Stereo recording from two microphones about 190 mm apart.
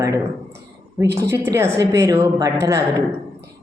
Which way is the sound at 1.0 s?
60° right (ahead or behind).